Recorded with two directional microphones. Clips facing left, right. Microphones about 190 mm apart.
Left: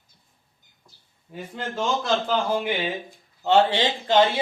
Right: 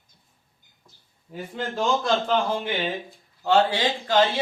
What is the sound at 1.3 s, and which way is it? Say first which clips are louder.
Speech: right 2 dB; centre (ahead or behind).